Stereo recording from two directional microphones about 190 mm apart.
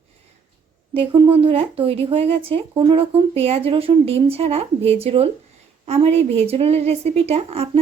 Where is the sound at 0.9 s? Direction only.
25° right (ahead or behind).